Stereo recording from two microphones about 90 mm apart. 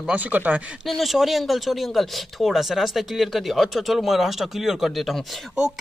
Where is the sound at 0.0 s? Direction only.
15° right (ahead or behind).